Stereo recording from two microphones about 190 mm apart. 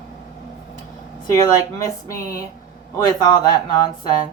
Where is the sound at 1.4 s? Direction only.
15° left (ahead or behind).